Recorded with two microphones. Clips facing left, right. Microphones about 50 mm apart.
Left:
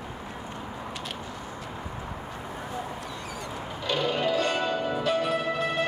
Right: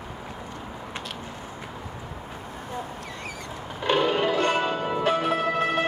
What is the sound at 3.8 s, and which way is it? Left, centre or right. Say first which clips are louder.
Music: right 5 dB; right.